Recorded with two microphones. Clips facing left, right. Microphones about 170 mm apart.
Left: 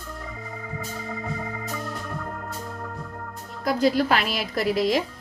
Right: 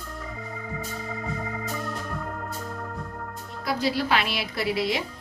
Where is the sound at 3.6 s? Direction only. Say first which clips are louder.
Left 5 dB; 45° left (ahead or behind).